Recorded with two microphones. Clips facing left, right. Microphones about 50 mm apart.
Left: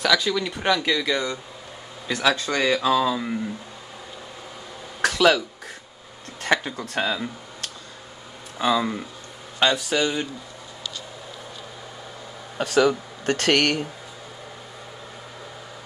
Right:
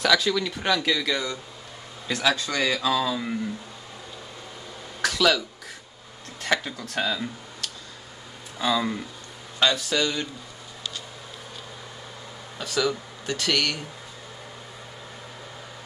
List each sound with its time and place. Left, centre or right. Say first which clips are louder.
0.0 s speech: even; centre
0.5 s speech: left 2 dB; centre
2.1 s speech: left 2 dB; left
5.0 s a sound: left 4 dB; left
6.5 s speech: left 3 dB; left
8.5 s speech: left 3 dB; centre
9.6 s speech: left 2 dB; left
12.5 s speech: left 6 dB; left